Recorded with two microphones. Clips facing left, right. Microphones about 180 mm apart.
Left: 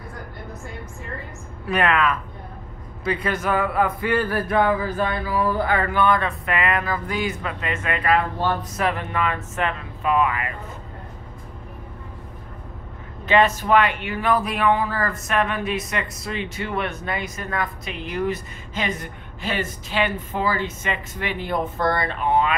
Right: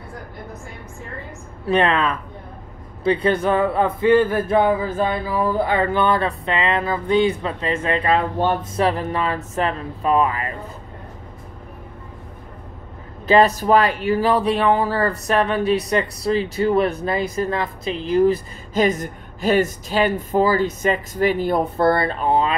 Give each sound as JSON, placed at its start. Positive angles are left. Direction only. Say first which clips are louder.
{"t": 1.7, "sound": "speech", "louder": "right 2 dB", "side_deg": -30}
{"t": 8.8, "sound": "speech", "louder": "right 3 dB", "side_deg": -35}
{"t": 13.3, "sound": "speech", "louder": "right 3 dB", "side_deg": -35}